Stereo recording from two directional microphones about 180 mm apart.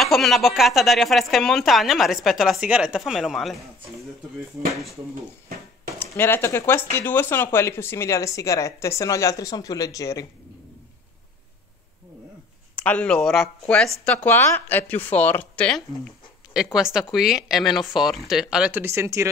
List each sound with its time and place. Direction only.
0.0 s speech: centre (ahead or behind)
5.9 s speech: 10° left (ahead or behind)
12.7 s speech: 5° left (ahead or behind); by 19.2 s 15° right (ahead or behind)